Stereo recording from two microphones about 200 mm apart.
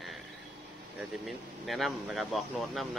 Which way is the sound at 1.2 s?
Centre (ahead or behind).